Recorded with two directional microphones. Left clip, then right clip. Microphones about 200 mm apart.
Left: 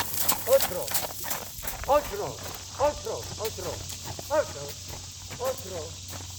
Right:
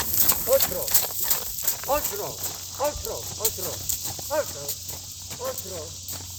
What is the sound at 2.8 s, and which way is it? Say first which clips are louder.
Speech: left 1 dB; 15° right (ahead or behind).